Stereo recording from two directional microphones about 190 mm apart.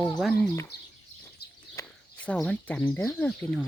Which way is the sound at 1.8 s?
5° left (ahead or behind).